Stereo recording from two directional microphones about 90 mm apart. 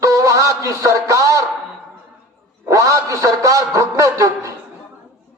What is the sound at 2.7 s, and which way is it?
A man's voice, 35° right (ahead or behind).